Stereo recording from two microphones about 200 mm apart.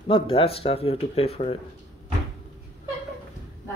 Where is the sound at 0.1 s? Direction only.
25° left (ahead or behind).